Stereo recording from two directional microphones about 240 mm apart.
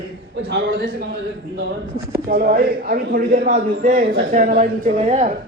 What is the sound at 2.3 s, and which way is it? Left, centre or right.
A man's voice, right.